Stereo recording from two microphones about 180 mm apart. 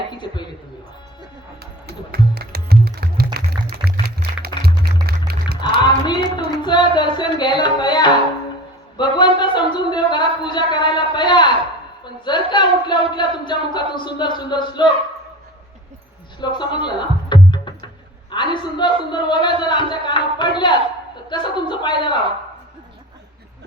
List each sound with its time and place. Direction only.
0.1 s a woman's voice: 25° left (ahead or behind)
1.9 s music: 60° right (ahead or behind)
5.5 s a sound: 25° left (ahead or behind)
9.0 s speech: 25° left (ahead or behind)
16.4 s music: 25° left (ahead or behind)
18.3 s speech: 25° left (ahead or behind)